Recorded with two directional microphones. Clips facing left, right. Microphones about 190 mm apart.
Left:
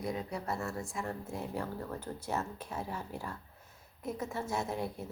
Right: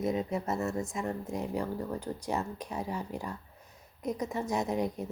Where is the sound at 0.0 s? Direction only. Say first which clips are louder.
Right 6 dB; 20° right (ahead or behind).